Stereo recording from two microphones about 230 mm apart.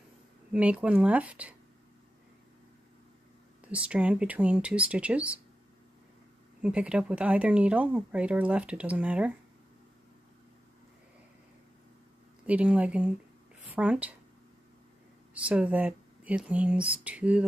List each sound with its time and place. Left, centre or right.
0.5 s speech: centre
3.7 s speech: centre
6.6 s speech: centre
12.4 s a woman's voice: centre
15.3 s speech: centre